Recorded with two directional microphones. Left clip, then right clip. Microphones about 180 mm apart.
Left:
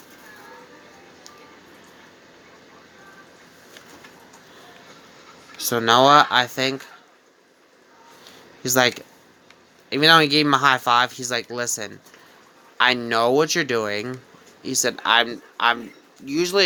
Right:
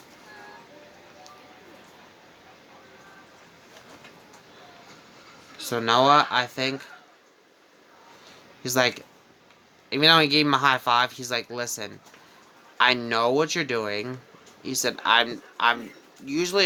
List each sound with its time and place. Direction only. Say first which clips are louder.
5.5 s speech: left 5 dB; 20° left (ahead or behind)
8.6 s speech: left 4 dB; 20° left (ahead or behind)